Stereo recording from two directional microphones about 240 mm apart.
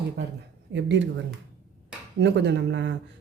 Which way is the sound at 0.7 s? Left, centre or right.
Right.